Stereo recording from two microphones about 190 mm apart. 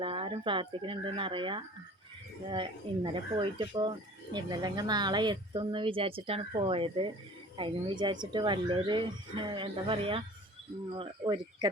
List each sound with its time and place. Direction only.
0.0 s speech: 25° right (ahead or behind)